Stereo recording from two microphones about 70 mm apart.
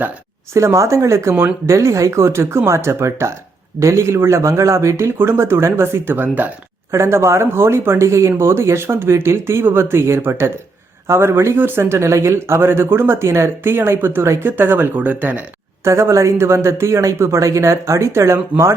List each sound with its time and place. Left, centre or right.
0.5 s speech: right
6.9 s speech: right
15.8 s speech: right